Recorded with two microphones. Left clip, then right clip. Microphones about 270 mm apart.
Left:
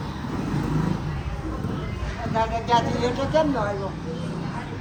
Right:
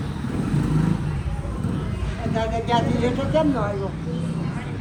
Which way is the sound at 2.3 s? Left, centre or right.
Left.